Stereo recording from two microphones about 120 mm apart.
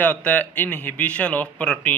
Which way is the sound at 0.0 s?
15° left (ahead or behind).